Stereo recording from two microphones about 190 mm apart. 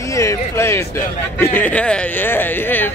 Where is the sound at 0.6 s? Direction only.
15° left (ahead or behind).